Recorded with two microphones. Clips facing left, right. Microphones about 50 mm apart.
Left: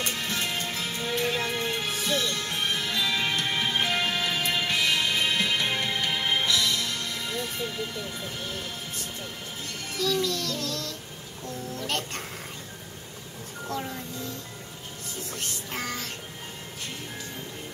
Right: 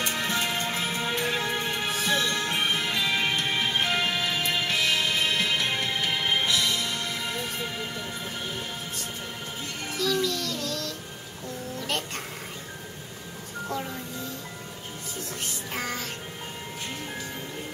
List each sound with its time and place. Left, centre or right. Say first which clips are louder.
0.0 s music: right 3 dB; right; by 6.4 s centre
6.4 s music: even; centre
9.9 s music: even; centre
11.8 s music: even; centre
15.7 s music: right 1 dB; centre